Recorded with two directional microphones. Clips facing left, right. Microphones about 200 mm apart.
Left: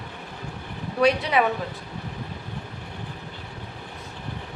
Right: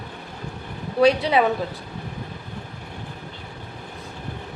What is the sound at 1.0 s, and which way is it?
Speech, 30° right (ahead or behind).